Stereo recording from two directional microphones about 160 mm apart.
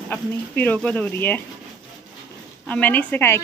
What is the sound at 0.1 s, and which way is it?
Speech, 10° left (ahead or behind).